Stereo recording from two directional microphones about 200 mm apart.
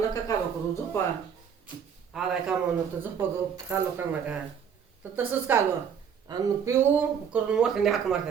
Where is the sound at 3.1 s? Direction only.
15° right (ahead or behind).